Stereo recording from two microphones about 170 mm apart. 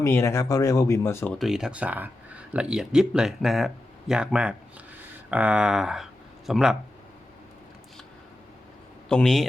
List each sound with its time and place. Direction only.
0.0 s speech: 15° left (ahead or behind)
1.4 s speech: 5° right (ahead or behind)
9.0 s speech: 5° left (ahead or behind)